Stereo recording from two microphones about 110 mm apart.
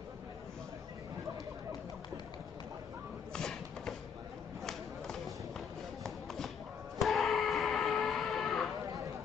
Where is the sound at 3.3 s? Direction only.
5° left (ahead or behind).